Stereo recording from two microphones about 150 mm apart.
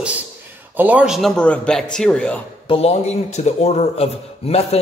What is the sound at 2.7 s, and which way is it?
A man's voice, 45° left (ahead or behind).